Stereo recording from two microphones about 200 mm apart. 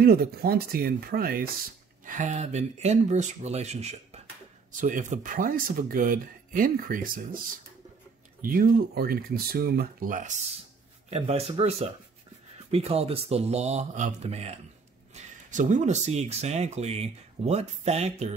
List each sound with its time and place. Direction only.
0.0 s speech: 50° right (ahead or behind)
2.0 s speech: 40° right (ahead or behind)
8.4 s speech: 45° right (ahead or behind)
11.1 s speech: 30° right (ahead or behind)